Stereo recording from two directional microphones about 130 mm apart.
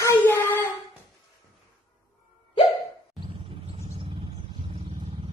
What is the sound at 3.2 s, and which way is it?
Vehicle, 45° right (ahead or behind).